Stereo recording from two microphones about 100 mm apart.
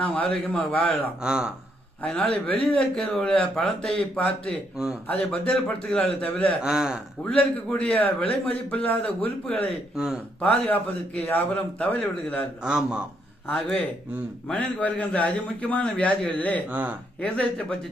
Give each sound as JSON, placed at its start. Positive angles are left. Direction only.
{"t": 0.0, "sound": "a man's voice", "side_deg": 15}
{"t": 1.2, "sound": "speech", "side_deg": -5}
{"t": 2.0, "sound": "a man's voice", "side_deg": 10}
{"t": 6.6, "sound": "speech", "side_deg": -5}
{"t": 7.3, "sound": "a man's voice", "side_deg": 10}
{"t": 9.9, "sound": "speech", "side_deg": -5}
{"t": 10.7, "sound": "a man's voice", "side_deg": 15}
{"t": 12.6, "sound": "speech", "side_deg": -10}
{"t": 13.6, "sound": "a man's voice", "side_deg": 5}
{"t": 16.6, "sound": "speech", "side_deg": -15}
{"t": 17.2, "sound": "a man's voice", "side_deg": 10}